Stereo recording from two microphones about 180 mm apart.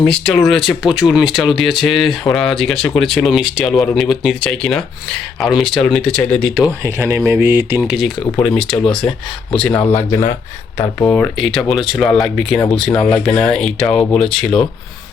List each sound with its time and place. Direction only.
0.0 s speech: 5° left (ahead or behind)
6.8 s speech: 15° right (ahead or behind)
7.8 s speech: centre (ahead or behind)
9.9 s speech: 15° left (ahead or behind)